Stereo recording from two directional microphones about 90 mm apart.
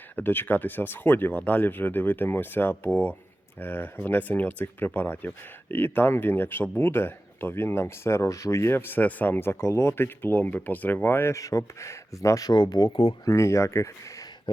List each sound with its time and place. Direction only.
0.2 s speech: 20° left (ahead or behind)
12.5 s speech: 50° left (ahead or behind)
13.2 s speech: 35° left (ahead or behind)